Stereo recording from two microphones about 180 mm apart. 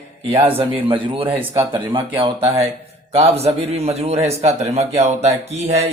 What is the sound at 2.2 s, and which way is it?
Speech, 35° right (ahead or behind).